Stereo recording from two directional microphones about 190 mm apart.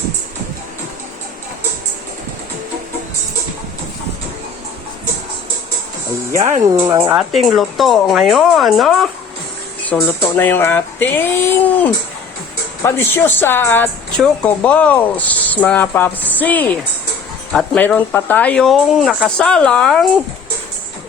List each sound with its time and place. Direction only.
6.3 s speech: 35° right (ahead or behind)
6.7 s speech: 15° right (ahead or behind)
7.2 s speech: centre (ahead or behind)